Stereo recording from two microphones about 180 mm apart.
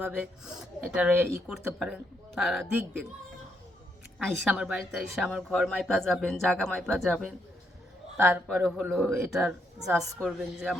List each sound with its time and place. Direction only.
0.0 s a woman's voice: 5° right (ahead or behind)
4.2 s a woman's voice: centre (ahead or behind)